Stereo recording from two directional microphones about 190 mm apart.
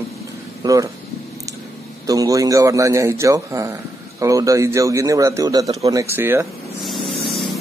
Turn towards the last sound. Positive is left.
turn(degrees=0)  # may be behind; listen again after turning